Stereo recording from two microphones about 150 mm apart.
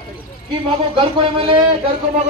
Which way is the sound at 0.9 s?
35° right (ahead or behind).